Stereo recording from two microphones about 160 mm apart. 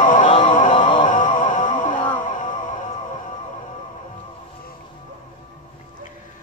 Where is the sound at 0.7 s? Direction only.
30° left (ahead or behind).